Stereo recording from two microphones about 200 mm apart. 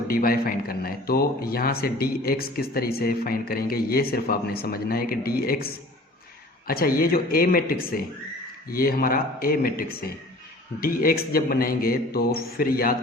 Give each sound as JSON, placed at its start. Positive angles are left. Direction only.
{"t": 0.1, "sound": "a man's voice", "side_deg": 45}